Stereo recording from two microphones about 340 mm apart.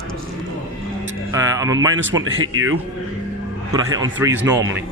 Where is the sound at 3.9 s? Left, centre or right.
Centre.